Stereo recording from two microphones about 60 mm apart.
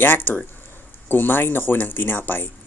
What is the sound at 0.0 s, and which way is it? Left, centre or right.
Speech, left.